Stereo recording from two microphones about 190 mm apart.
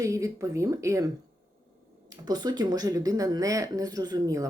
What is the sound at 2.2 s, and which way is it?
Speech, 20° right (ahead or behind).